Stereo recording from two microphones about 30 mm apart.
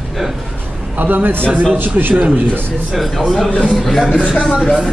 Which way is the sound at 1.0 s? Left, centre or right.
Right.